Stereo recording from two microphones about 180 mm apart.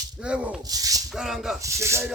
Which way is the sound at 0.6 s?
20° right (ahead or behind).